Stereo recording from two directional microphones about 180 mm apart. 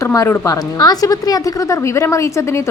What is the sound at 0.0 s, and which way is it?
Speech, 15° left (ahead or behind).